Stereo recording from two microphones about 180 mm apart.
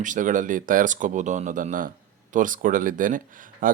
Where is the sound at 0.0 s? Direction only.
45° right (ahead or behind).